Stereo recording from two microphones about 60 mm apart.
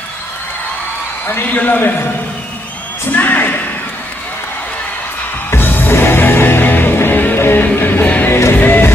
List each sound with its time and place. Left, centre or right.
1.2 s a man's voice: left
3.1 s speech: left
5.5 s music: left
8.3 s music: left
8.5 s music: left